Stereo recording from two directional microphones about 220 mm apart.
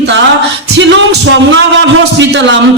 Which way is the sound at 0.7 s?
55° right (ahead or behind).